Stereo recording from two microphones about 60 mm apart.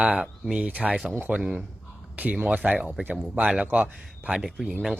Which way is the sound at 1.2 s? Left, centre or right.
Right.